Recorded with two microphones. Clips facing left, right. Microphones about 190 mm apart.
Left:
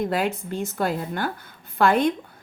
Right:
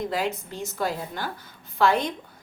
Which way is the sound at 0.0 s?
55° left (ahead or behind).